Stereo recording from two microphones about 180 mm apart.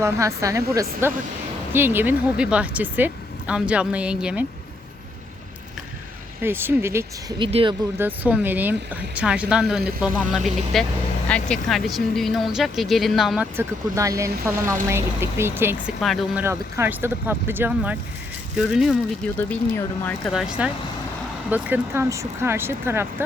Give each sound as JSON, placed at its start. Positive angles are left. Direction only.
{"t": 0.0, "sound": "speech", "side_deg": -15}
{"t": 6.4, "sound": "speech", "side_deg": -10}
{"t": 7.3, "sound": "speech", "side_deg": -30}
{"t": 7.9, "sound": "speech", "side_deg": -10}
{"t": 13.6, "sound": "speech", "side_deg": -20}
{"t": 16.0, "sound": "speech", "side_deg": 0}
{"t": 16.4, "sound": "speech", "side_deg": -15}
{"t": 19.4, "sound": "speech", "side_deg": 10}
{"t": 20.3, "sound": "speech", "side_deg": -5}